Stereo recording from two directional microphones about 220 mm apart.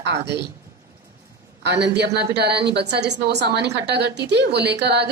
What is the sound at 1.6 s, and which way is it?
A woman's voice, 50° right (ahead or behind).